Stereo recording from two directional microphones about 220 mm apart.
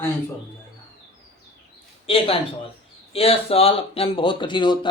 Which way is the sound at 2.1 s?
25° left (ahead or behind).